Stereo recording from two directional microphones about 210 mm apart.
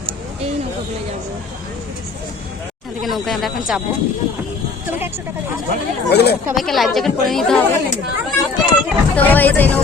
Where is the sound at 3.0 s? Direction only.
Centre (ahead or behind).